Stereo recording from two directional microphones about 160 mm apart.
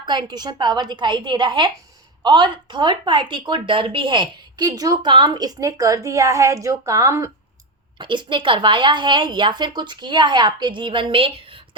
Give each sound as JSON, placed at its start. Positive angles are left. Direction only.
{"t": 0.0, "sound": "a woman's voice", "side_deg": -30}